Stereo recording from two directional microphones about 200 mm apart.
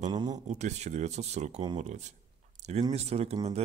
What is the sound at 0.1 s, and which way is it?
Speech, 20° right (ahead or behind).